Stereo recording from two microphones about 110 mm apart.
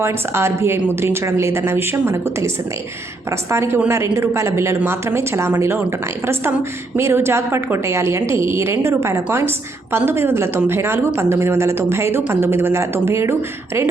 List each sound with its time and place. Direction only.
0.0 s a woman's voice: 25° right (ahead or behind)
6.9 s a woman's voice: 20° right (ahead or behind)